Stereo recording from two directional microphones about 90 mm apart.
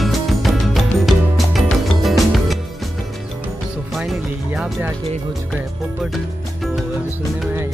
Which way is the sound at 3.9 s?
5° right (ahead or behind).